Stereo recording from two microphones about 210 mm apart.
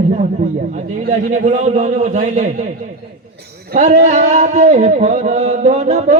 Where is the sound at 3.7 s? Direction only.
35° right (ahead or behind).